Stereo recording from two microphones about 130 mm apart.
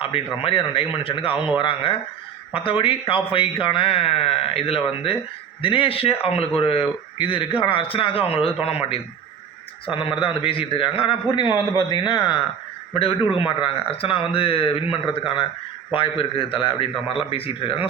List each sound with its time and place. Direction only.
0.0 s a man's voice: 45° left (ahead or behind)